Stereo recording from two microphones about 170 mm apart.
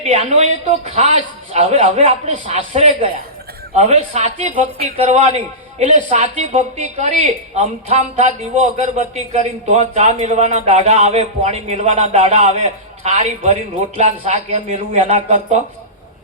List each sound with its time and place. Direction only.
0.0 s a woman's voice: 40° right (ahead or behind)